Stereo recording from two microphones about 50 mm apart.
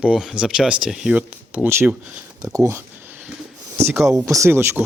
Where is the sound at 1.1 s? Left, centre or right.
Right.